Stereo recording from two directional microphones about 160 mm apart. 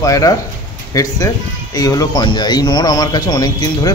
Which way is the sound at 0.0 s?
20° left (ahead or behind).